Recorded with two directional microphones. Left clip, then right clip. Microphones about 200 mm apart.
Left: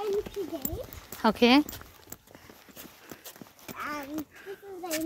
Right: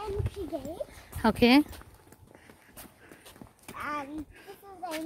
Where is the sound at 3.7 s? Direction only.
10° right (ahead or behind).